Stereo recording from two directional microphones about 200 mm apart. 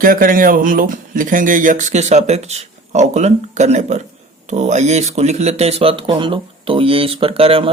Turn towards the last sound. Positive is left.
turn(degrees=-30)  # may be behind; listen again after turning